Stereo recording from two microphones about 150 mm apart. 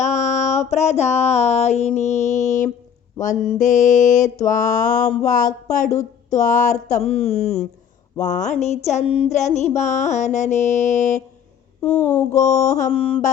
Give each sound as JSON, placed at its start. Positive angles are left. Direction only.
{"t": 0.0, "sound": "a sound", "side_deg": 50}
{"t": 3.5, "sound": "mantra", "side_deg": 55}
{"t": 5.1, "sound": "speech", "side_deg": 55}
{"t": 12.3, "sound": "speech", "side_deg": 50}
{"t": 12.9, "sound": "mantra", "side_deg": 40}